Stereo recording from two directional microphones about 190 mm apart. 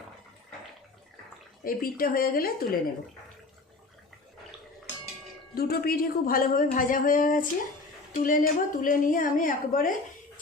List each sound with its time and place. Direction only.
1.6 s a woman's voice: 50° left (ahead or behind)
5.5 s a woman's voice: 50° left (ahead or behind)